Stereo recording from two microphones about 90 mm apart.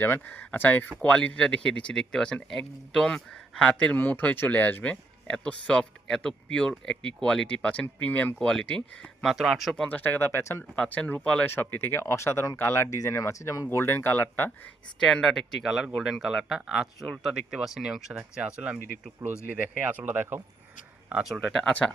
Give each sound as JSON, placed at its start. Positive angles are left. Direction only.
{"t": 0.0, "sound": "speech", "side_deg": 20}
{"t": 9.3, "sound": "speech", "side_deg": -5}
{"t": 9.8, "sound": "speech", "side_deg": 20}
{"t": 11.4, "sound": "speech", "side_deg": 20}
{"t": 14.9, "sound": "speech", "side_deg": 5}
{"t": 21.1, "sound": "speech", "side_deg": -10}
{"t": 21.7, "sound": "speech", "side_deg": 15}